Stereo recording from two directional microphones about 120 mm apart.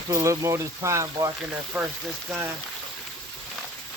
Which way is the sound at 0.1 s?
25° right (ahead or behind).